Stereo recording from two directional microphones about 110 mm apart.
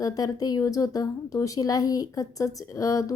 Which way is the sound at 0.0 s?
35° left (ahead or behind).